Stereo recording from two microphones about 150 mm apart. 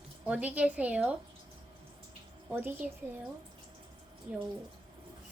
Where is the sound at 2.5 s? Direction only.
10° right (ahead or behind).